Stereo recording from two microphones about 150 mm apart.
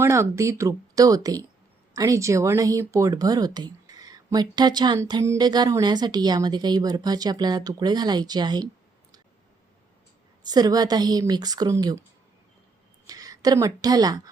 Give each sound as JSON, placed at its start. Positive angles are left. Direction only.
{"t": 0.0, "sound": "a woman's voice", "side_deg": -20}
{"t": 10.4, "sound": "a woman's voice", "side_deg": -25}
{"t": 13.1, "sound": "a woman's voice", "side_deg": -25}